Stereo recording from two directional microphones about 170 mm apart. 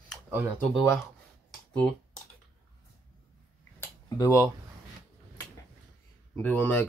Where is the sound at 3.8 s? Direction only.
20° left (ahead or behind).